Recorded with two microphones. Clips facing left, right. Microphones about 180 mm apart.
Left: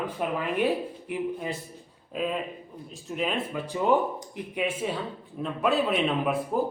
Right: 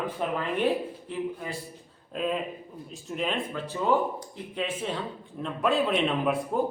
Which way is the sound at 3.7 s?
15° left (ahead or behind).